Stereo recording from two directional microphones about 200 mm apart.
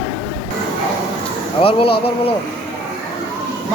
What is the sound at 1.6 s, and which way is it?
Speech, 25° left (ahead or behind).